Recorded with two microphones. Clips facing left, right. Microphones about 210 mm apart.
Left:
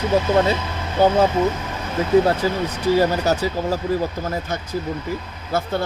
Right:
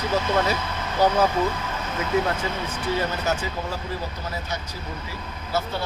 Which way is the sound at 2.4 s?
35° left (ahead or behind).